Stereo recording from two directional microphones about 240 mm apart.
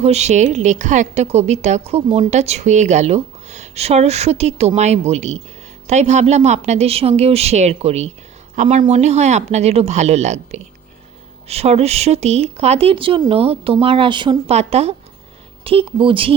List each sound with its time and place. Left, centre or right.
0.0 s a woman's voice: right